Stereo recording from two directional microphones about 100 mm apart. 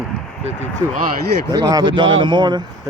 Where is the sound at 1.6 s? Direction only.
45° right (ahead or behind).